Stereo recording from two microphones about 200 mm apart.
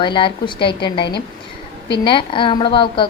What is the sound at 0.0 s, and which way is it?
Speech, 25° left (ahead or behind).